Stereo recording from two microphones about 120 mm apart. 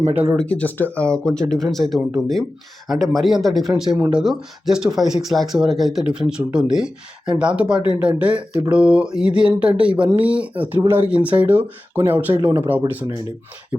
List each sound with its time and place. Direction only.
0.3 s speech: 10° left (ahead or behind)
3.9 s speech: 15° right (ahead or behind)
4.2 s speech: 5° right (ahead or behind)